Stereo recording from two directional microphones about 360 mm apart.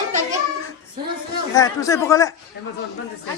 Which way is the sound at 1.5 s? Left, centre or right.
Centre.